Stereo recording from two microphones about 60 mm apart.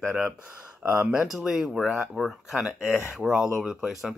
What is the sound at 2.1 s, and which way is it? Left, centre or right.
Speech, centre.